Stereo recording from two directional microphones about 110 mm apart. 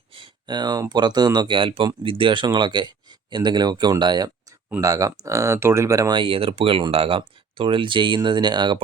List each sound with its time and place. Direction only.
0.2 s speech: 40° right (ahead or behind)
6.1 s speech: 55° right (ahead or behind)